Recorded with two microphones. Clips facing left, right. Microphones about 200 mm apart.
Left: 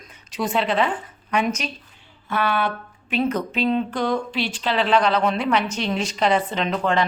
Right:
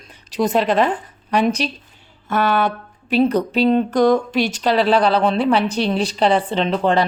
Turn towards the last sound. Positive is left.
turn(degrees=-30)  # may be behind; listen again after turning